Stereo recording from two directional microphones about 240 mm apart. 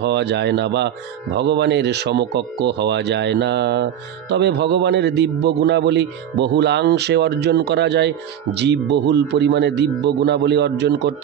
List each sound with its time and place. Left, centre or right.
0.0 s speech: right